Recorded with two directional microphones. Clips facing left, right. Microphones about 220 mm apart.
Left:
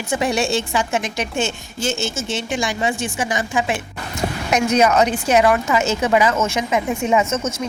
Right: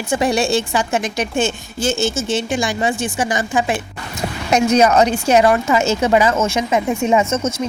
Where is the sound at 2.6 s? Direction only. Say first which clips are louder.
Right 2 dB; 35° right (ahead or behind).